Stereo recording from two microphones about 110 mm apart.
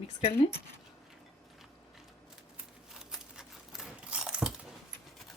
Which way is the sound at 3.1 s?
5° right (ahead or behind).